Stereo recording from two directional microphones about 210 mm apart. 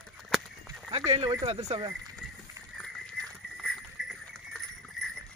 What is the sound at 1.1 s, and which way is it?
Speech, 25° right (ahead or behind).